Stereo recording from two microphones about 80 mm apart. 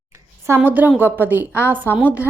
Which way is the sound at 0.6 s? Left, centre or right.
Right.